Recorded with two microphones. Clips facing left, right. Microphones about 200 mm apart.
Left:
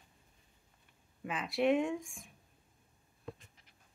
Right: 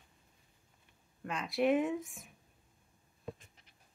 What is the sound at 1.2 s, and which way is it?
Speech, 5° left (ahead or behind).